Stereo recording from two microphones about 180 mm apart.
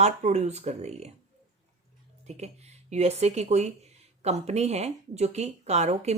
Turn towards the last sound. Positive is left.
turn(degrees=-40)  # may be behind; listen again after turning